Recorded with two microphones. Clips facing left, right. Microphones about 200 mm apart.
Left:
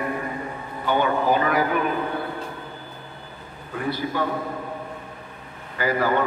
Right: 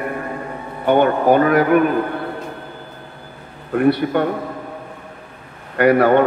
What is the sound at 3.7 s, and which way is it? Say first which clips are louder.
Speech: right 10 dB; 65° right (ahead or behind).